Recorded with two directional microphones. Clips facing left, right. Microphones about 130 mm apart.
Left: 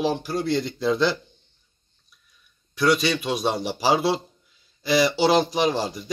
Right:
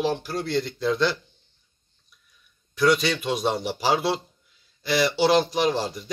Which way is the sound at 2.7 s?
Centre (ahead or behind).